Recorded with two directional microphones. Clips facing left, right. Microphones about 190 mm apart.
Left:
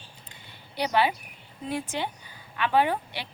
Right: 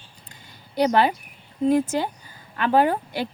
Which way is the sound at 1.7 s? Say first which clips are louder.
Right 10 dB; 40° right (ahead or behind).